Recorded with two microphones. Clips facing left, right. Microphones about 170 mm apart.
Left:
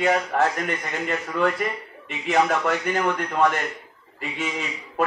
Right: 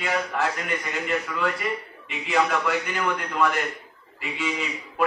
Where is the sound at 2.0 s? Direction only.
45° left (ahead or behind).